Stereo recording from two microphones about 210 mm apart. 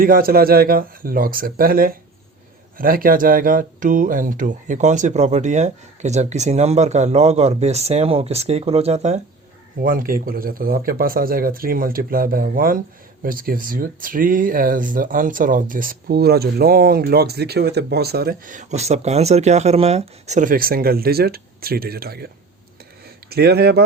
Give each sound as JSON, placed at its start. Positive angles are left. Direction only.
{"t": 0.0, "sound": "speech", "side_deg": -45}
{"t": 9.8, "sound": "speech", "side_deg": -40}
{"t": 23.3, "sound": "speech", "side_deg": -50}